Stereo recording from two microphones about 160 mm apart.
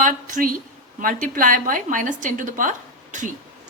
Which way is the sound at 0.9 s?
60° right (ahead or behind).